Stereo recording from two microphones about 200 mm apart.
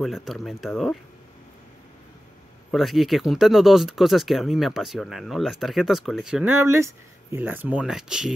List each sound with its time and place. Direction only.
0.0 s speech: centre (ahead or behind)
2.7 s speech: centre (ahead or behind)